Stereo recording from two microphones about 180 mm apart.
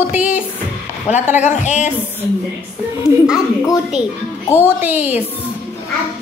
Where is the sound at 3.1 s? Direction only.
5° right (ahead or behind).